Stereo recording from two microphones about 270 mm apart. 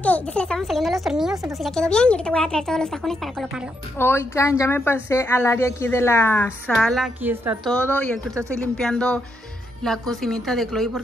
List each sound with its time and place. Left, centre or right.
0.0 s a woman's voice: centre